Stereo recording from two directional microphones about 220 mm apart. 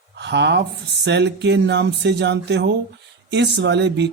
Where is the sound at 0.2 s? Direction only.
50° right (ahead or behind).